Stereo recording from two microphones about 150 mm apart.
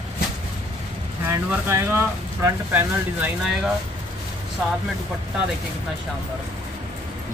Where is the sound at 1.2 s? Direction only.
20° right (ahead or behind).